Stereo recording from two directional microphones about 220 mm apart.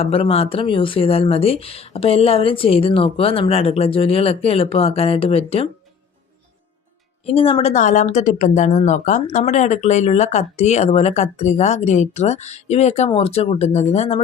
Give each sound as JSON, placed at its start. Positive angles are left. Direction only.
{"t": 0.0, "sound": "speech", "side_deg": 25}
{"t": 7.3, "sound": "speech", "side_deg": 25}